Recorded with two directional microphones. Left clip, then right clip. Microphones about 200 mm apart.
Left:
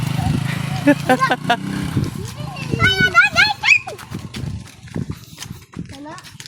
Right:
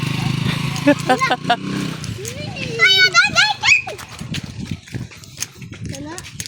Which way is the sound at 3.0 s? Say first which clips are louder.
Even; 60° right (ahead or behind).